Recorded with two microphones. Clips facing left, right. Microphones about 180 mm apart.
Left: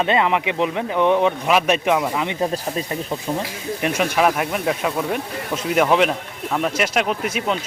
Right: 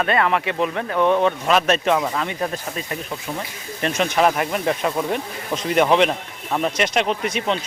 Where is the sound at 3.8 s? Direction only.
10° left (ahead or behind).